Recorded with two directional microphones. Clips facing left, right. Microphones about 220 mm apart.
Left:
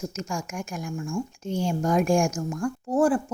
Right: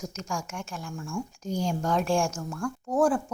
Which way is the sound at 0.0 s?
5° left (ahead or behind).